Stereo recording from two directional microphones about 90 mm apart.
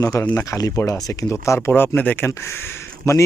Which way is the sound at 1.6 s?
25° left (ahead or behind).